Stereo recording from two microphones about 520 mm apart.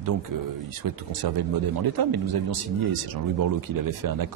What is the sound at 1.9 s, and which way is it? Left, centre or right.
Speech, right.